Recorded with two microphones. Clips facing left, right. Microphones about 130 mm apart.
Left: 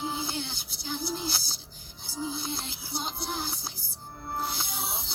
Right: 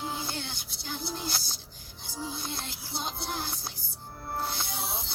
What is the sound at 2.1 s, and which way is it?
Music, 5° left (ahead or behind).